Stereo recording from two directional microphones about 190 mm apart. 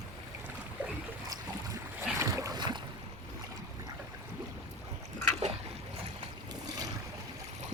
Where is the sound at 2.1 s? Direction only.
15° right (ahead or behind).